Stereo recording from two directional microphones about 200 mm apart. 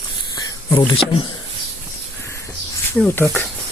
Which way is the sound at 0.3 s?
20° left (ahead or behind).